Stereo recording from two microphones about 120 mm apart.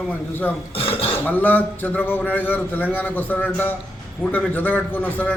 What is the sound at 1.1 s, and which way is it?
A man's voice, 15° left (ahead or behind).